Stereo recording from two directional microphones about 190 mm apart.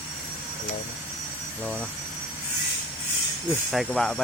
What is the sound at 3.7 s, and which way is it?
Speech, centre (ahead or behind).